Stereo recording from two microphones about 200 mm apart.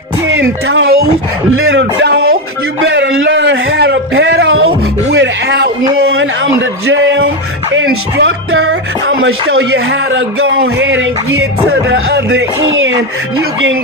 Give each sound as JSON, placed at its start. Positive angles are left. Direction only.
{"t": 0.3, "sound": "a man's voice", "side_deg": -70}
{"t": 2.9, "sound": "a man's voice", "side_deg": -65}
{"t": 5.1, "sound": "music", "side_deg": -60}
{"t": 5.9, "sound": "a sound", "side_deg": -55}
{"t": 6.4, "sound": "a man's voice", "side_deg": -70}
{"t": 7.7, "sound": "music", "side_deg": -80}
{"t": 9.2, "sound": "a man's voice", "side_deg": -80}